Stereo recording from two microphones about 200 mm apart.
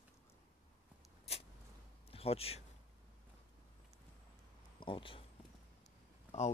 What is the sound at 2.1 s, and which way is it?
Speech, 30° left (ahead or behind).